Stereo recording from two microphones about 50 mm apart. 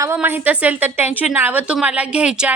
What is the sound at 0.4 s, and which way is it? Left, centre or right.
Speech, right.